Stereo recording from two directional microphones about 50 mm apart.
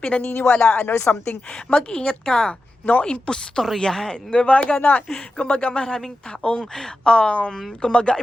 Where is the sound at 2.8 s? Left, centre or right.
Left.